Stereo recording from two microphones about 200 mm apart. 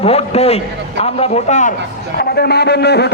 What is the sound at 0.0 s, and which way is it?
A man's voice, 30° left (ahead or behind).